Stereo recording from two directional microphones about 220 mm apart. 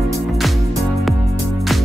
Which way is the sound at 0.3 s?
Centre (ahead or behind).